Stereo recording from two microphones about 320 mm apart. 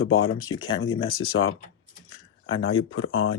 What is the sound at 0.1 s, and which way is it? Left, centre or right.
Speech, left.